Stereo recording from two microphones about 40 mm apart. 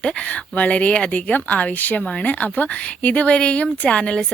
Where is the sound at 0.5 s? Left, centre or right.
Left.